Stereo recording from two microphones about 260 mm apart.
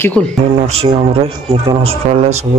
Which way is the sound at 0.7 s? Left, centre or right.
Right.